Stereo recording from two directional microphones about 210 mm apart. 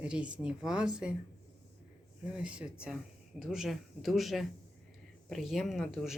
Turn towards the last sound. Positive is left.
turn(degrees=0)  # may be behind; listen again after turning